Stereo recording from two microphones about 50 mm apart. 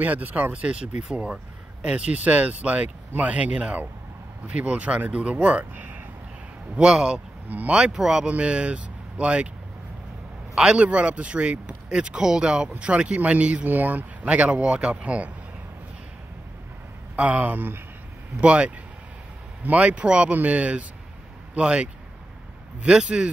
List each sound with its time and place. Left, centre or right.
0.0 s speech: right
5.8 s a sound: right
6.7 s speech: centre
7.4 s speech: right
7.7 s speech: centre
8.3 s speech: right
10.5 s speech: centre; by 14.3 s right
14.3 s speech: right
17.1 s speech: right
18.4 s speech: right